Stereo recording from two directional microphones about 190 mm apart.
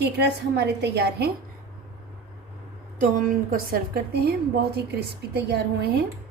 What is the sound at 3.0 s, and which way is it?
A woman's voice, 45° right (ahead or behind).